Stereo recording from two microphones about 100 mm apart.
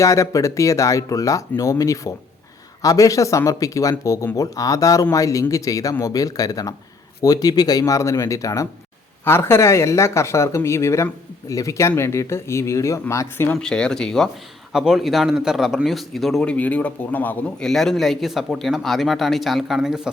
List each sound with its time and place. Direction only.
0.0 s speech: 30° left (ahead or behind)
13.6 s a man's voice: 10° left (ahead or behind)
14.7 s speech: 5° right (ahead or behind)
16.4 s a man's voice: 15° left (ahead or behind)
17.7 s speech: 5° left (ahead or behind)